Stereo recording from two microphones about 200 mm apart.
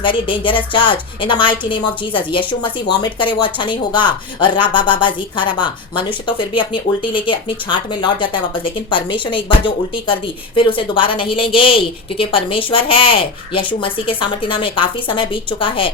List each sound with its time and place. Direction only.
0.0 s speech: 25° left (ahead or behind)